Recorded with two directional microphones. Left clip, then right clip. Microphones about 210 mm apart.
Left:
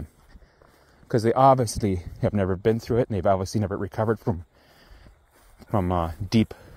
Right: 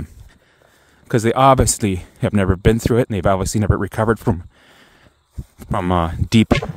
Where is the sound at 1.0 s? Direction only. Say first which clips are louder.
Right 5 dB; 60° right (ahead or behind).